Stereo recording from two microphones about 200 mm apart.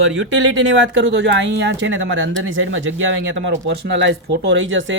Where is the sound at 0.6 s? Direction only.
65° right (ahead or behind).